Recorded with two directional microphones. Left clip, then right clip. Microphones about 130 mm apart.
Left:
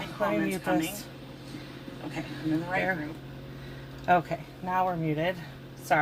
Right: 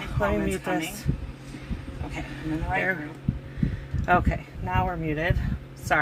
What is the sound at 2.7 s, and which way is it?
Speech, 45° right (ahead or behind).